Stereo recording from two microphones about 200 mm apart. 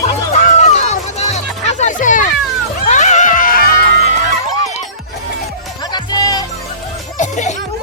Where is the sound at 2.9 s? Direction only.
35° left (ahead or behind).